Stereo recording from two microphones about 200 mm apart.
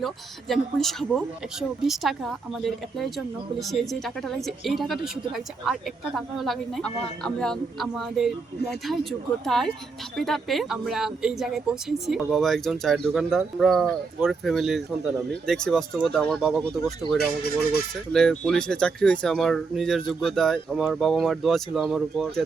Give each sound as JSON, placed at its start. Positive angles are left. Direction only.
{"t": 0.0, "sound": "speech", "side_deg": 0}
{"t": 9.4, "sound": "speech", "side_deg": 0}
{"t": 17.2, "sound": "speech", "side_deg": 50}
{"t": 18.1, "sound": "speech", "side_deg": 0}